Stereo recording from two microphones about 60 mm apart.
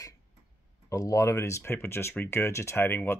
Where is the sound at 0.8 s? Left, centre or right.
Left.